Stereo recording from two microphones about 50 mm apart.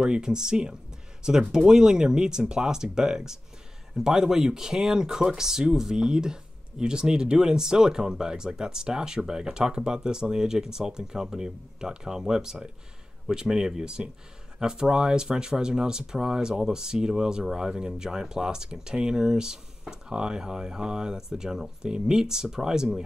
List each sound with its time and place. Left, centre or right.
0.0 s speech: centre